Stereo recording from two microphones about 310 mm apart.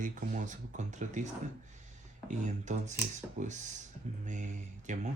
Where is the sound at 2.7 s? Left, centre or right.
Right.